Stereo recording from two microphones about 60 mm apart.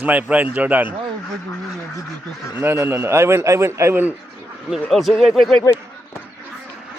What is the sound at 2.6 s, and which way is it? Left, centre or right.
A man's voice, right.